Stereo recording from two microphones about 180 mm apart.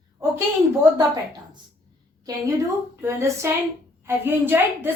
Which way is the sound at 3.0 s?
15° right (ahead or behind).